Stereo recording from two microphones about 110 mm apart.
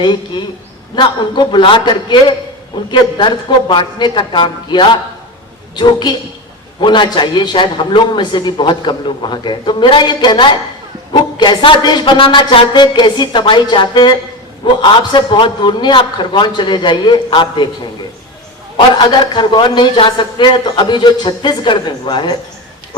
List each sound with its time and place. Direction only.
0.0 s a man's voice: 45° left (ahead or behind)
18.9 s a man's voice: 45° left (ahead or behind)